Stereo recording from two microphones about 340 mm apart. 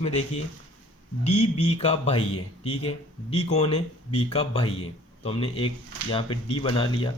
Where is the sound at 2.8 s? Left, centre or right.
Centre.